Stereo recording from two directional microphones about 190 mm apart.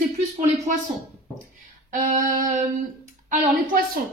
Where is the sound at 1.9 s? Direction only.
45° right (ahead or behind).